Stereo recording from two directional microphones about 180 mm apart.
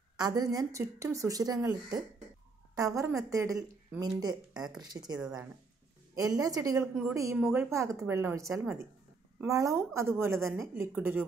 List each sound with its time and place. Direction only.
0.2 s a woman's voice: 20° right (ahead or behind)
6.8 s a woman's voice: 5° right (ahead or behind)